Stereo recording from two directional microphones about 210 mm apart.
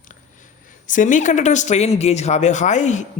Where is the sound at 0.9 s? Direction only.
40° left (ahead or behind).